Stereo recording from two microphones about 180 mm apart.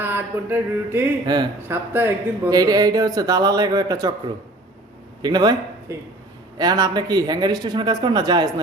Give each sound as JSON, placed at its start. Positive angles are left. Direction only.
{"t": 0.0, "sound": "speech", "side_deg": -10}
{"t": 5.2, "sound": "speech", "side_deg": -25}